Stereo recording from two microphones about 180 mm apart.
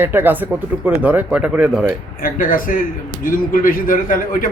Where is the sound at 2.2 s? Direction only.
50° left (ahead or behind).